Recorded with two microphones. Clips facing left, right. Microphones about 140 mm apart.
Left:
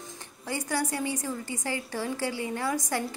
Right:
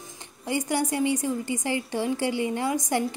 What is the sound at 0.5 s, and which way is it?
A woman's voice, 20° right (ahead or behind).